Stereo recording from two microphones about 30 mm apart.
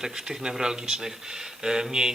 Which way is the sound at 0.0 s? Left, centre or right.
Right.